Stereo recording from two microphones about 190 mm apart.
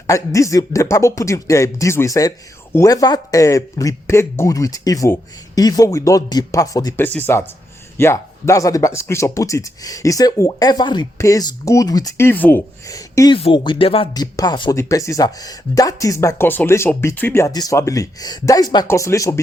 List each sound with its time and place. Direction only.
0.1 s speech: 15° left (ahead or behind)